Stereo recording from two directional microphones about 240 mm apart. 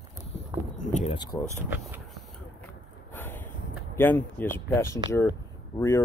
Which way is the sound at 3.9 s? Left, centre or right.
Centre.